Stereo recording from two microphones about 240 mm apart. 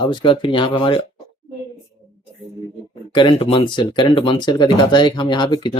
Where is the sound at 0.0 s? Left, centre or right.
Centre.